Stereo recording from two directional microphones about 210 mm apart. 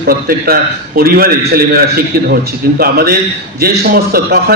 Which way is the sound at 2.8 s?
45° right (ahead or behind).